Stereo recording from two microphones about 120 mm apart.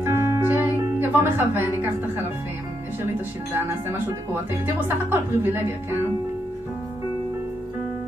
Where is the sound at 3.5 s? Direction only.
20° right (ahead or behind).